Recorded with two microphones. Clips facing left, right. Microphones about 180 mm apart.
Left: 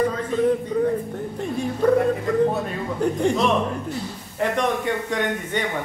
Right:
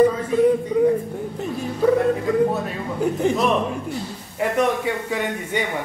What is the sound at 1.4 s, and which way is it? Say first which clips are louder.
Dog: even; 5° right (ahead or behind).